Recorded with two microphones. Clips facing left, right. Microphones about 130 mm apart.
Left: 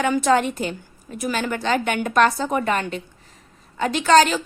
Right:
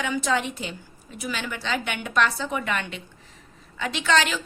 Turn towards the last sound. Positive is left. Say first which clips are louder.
# left 8 dB
turn(degrees=40)  # may be behind; listen again after turning